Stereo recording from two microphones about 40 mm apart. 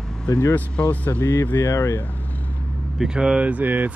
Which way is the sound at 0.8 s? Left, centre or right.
Left.